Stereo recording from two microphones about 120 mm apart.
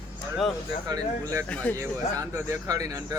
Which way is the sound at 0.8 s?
30° right (ahead or behind).